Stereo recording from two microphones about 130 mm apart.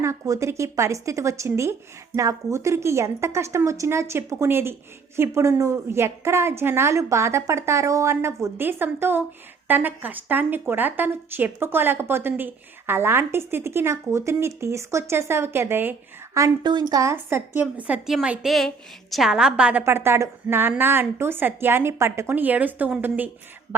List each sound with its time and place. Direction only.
0.0 s a woman's voice: 20° right (ahead or behind)
19.8 s a woman's voice: 20° right (ahead or behind)